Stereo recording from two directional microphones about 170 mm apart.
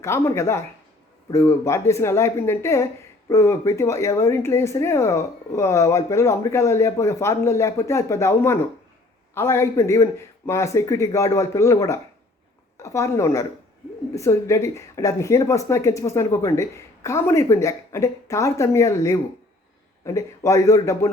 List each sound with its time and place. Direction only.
0.0 s a woman's voice: 15° left (ahead or behind)